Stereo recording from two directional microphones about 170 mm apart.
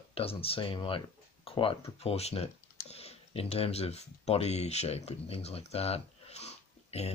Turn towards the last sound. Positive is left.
turn(degrees=40)  # may be behind; listen again after turning